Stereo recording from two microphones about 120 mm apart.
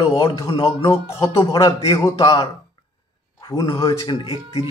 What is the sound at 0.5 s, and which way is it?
Speech, 50° left (ahead or behind).